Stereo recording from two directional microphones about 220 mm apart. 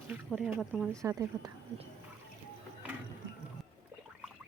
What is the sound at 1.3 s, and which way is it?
Speech, 20° right (ahead or behind).